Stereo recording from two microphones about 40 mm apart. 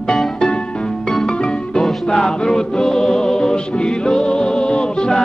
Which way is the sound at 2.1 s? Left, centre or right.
Centre.